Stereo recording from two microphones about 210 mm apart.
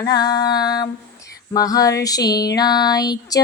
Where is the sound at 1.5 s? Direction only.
15° left (ahead or behind).